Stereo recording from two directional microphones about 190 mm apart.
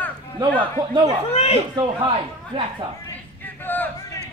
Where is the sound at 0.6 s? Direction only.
25° right (ahead or behind).